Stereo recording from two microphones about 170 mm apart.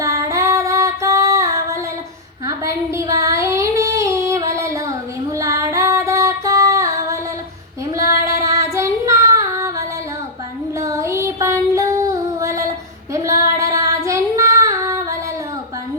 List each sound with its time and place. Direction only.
0.0 s female singing: 20° right (ahead or behind)
2.5 s child singing: 20° right (ahead or behind)
5.4 s music: 20° right (ahead or behind)
8.3 s child singing: 20° right (ahead or behind)
10.8 s music: 20° right (ahead or behind)
13.1 s child singing: 20° right (ahead or behind)